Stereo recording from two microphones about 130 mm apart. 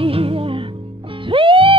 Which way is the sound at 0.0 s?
45° right (ahead or behind).